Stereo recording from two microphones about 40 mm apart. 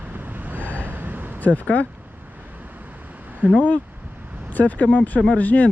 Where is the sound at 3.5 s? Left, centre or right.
Left.